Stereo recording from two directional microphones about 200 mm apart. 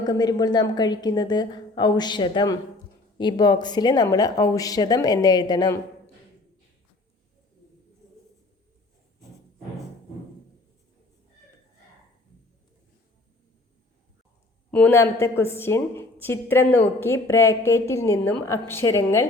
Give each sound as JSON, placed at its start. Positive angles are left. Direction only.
{"t": 0.0, "sound": "a woman's voice", "side_deg": 20}
{"t": 14.7, "sound": "a woman's voice", "side_deg": 10}